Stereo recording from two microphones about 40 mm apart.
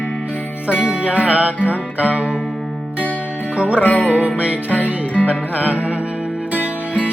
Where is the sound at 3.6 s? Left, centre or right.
Right.